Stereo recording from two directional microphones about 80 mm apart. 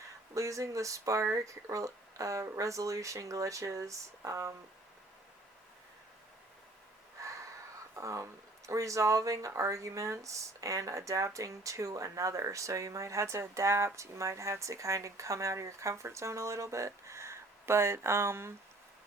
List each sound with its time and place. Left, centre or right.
0.3 s speech: right
7.9 s speech: right